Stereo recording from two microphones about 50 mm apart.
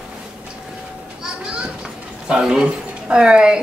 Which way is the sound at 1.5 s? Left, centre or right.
Centre.